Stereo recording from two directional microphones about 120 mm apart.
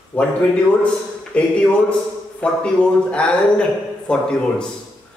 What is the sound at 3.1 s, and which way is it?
Speech, 10° left (ahead or behind).